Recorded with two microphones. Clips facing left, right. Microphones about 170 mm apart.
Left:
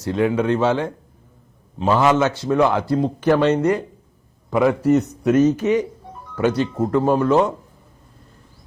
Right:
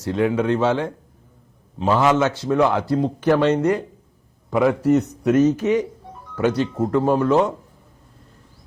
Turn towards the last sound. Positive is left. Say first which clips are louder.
# left 1 dB
turn(degrees=20)  # may be behind; listen again after turning